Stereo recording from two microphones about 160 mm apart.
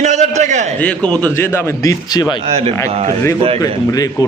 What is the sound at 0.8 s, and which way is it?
A man's voice, 10° left (ahead or behind).